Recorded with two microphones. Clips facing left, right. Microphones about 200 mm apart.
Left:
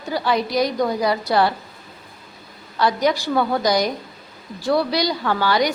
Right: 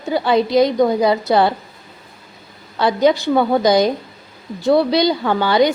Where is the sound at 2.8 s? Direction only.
25° right (ahead or behind).